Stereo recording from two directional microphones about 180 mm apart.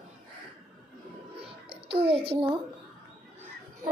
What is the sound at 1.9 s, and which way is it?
Speech, 30° right (ahead or behind).